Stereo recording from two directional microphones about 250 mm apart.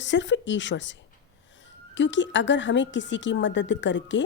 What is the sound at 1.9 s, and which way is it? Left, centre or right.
A woman's voice, left.